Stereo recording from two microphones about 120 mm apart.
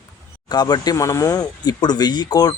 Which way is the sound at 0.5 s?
35° left (ahead or behind).